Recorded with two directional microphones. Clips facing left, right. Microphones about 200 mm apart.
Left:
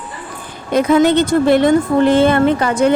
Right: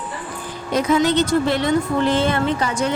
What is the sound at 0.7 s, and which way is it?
A woman's voice, 55° left (ahead or behind).